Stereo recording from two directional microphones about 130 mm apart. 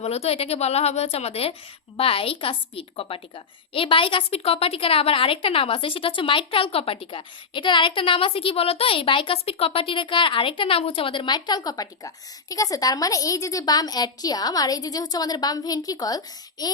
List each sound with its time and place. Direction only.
0.0 s a woman's voice: 50° left (ahead or behind); by 16.7 s 30° left (ahead or behind)